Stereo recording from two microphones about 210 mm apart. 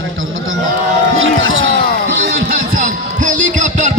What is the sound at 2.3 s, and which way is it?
Music, 45° right (ahead or behind).